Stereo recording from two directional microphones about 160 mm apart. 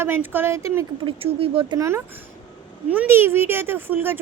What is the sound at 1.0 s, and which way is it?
Speech, 35° right (ahead or behind).